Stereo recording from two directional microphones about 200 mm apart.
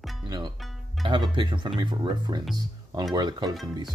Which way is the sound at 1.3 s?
25° right (ahead or behind).